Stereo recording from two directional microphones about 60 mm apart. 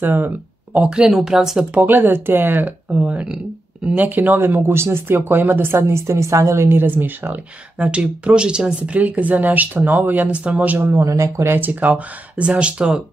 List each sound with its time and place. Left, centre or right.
0.0 s speech: right
0.7 s speech: centre
1.7 s speech: right
5.8 s speech: right
11.1 s speech: right
11.5 s speech: right